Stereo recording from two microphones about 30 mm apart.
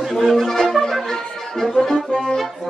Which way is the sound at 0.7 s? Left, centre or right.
Centre.